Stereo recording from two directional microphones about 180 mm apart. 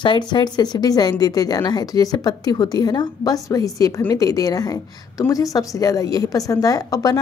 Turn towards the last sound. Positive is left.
turn(degrees=20)  # may be behind; listen again after turning